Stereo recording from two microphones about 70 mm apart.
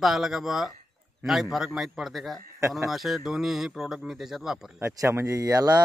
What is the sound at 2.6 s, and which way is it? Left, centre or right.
Speech, right.